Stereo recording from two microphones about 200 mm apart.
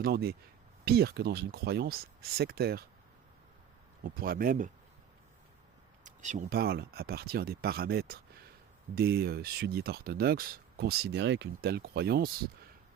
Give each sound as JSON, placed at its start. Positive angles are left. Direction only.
{"t": 0.0, "sound": "speech", "side_deg": -50}
{"t": 4.0, "sound": "speech", "side_deg": -45}
{"t": 6.0, "sound": "a sound", "side_deg": -40}
{"t": 6.6, "sound": "speech", "side_deg": -50}